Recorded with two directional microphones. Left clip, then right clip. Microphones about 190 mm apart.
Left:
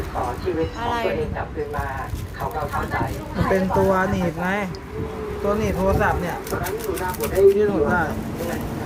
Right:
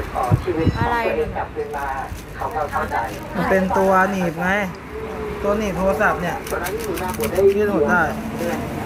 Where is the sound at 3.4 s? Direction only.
5° right (ahead or behind).